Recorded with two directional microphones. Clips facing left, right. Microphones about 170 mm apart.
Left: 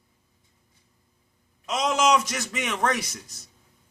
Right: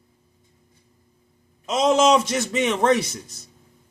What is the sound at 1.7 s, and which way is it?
Speech, 25° right (ahead or behind).